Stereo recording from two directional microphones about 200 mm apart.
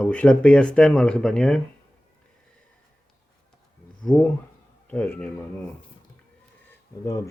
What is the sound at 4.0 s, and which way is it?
A man's voice, 5° left (ahead or behind).